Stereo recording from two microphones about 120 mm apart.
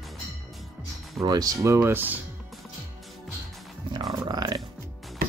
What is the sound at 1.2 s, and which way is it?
Speech, 30° right (ahead or behind).